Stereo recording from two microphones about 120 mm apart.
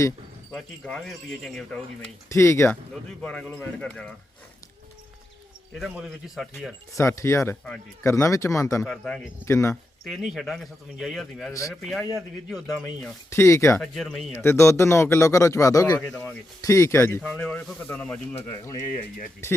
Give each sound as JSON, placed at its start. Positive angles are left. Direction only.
{"t": 0.5, "sound": "speech", "side_deg": 5}
{"t": 2.3, "sound": "speech", "side_deg": 20}
{"t": 3.2, "sound": "a man's voice", "side_deg": 10}
{"t": 5.9, "sound": "speech", "side_deg": -5}
{"t": 6.9, "sound": "speech", "side_deg": 25}
{"t": 8.9, "sound": "a man's voice", "side_deg": 10}
{"t": 9.5, "sound": "speech", "side_deg": 25}
{"t": 10.0, "sound": "speech", "side_deg": -5}
{"t": 13.3, "sound": "speech", "side_deg": 25}
{"t": 13.8, "sound": "speech", "side_deg": 5}
{"t": 14.3, "sound": "speech", "side_deg": 25}
{"t": 17.2, "sound": "a man's voice", "side_deg": 10}
{"t": 18.4, "sound": "speech", "side_deg": 30}